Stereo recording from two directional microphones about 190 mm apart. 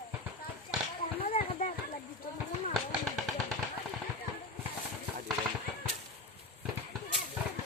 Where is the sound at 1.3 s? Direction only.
40° left (ahead or behind).